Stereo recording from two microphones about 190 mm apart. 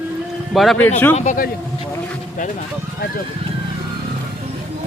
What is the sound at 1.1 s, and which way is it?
Speech, 40° left (ahead or behind).